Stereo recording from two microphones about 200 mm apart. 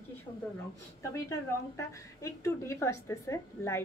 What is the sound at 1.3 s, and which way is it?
A woman's voice, 15° left (ahead or behind).